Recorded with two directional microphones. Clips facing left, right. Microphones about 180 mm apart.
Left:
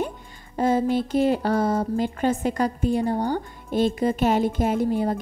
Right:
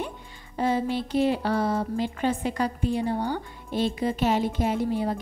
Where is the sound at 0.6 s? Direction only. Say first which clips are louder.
Left 4 dB; 45° left (ahead or behind).